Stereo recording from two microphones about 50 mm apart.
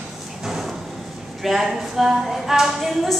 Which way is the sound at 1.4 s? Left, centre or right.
Centre.